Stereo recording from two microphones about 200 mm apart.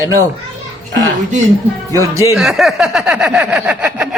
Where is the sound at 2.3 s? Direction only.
Centre (ahead or behind).